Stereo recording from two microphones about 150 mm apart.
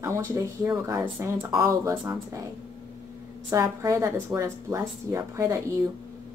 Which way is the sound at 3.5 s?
20° right (ahead or behind).